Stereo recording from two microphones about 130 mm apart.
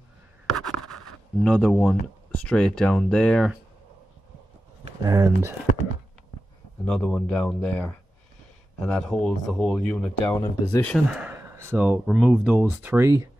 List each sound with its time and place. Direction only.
0.5 s scratch: centre (ahead or behind)
1.4 s speech: 5° left (ahead or behind)
5.0 s speech: 25° right (ahead or behind)
6.8 s speech: 10° left (ahead or behind)
10.2 s speech: 20° left (ahead or behind)
11.1 s speech: 10° right (ahead or behind)
11.3 s a sound: 20° right (ahead or behind)
12.1 s speech: centre (ahead or behind)
12.8 s speech: 20° right (ahead or behind)